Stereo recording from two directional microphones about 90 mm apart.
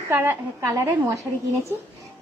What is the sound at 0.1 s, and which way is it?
Speech, 25° right (ahead or behind).